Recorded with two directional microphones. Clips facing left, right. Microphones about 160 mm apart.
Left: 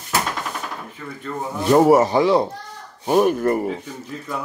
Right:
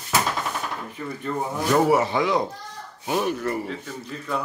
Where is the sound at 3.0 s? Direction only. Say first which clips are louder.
Left 8 dB; 45° left (ahead or behind).